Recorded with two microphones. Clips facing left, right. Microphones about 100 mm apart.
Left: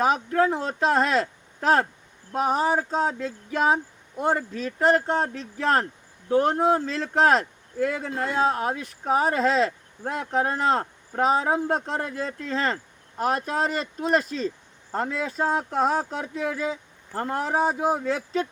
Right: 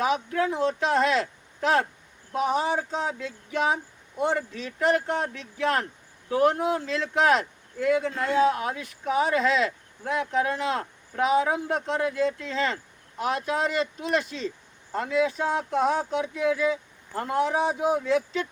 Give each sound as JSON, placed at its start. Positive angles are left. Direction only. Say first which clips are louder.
{"t": 0.0, "sound": "speech", "louder": "left 3 dB", "side_deg": 40}